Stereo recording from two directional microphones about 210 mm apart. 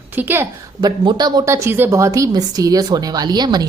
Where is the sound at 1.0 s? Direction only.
20° right (ahead or behind).